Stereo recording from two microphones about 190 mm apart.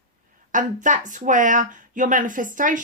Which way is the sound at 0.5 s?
40° right (ahead or behind).